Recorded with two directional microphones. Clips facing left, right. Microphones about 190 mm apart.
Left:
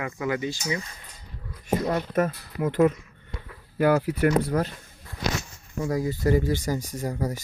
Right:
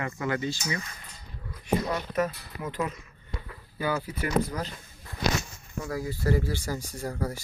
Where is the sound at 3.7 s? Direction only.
80° left; by 4.7 s 55° left (ahead or behind).